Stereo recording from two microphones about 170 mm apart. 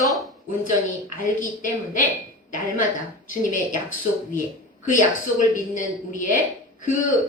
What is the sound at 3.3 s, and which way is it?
Speech, 50° left (ahead or behind).